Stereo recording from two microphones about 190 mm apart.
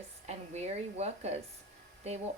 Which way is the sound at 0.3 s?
35° right (ahead or behind).